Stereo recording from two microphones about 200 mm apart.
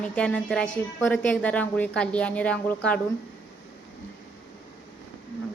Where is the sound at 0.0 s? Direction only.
5° left (ahead or behind).